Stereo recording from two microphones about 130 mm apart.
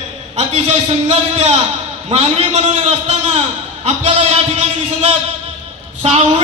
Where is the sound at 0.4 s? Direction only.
60° right (ahead or behind).